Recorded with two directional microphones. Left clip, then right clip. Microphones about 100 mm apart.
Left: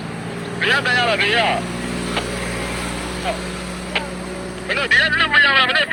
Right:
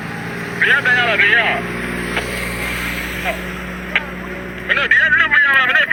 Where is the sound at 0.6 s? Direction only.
50° left (ahead or behind).